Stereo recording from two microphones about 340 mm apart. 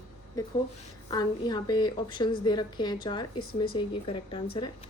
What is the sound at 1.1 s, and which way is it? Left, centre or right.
A woman's voice, centre.